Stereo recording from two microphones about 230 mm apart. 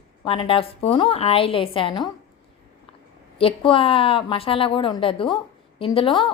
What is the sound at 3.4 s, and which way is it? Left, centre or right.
A woman's voice, left.